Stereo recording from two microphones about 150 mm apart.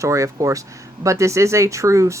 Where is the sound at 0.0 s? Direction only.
20° right (ahead or behind).